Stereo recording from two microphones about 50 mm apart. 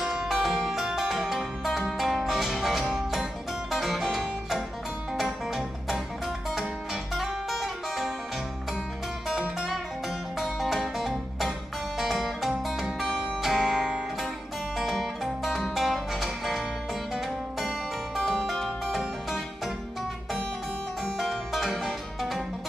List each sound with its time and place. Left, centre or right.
0.0 s music: centre
0.3 s music: centre
9.6 s music: centre
17.6 s music: centre
21.0 s music: centre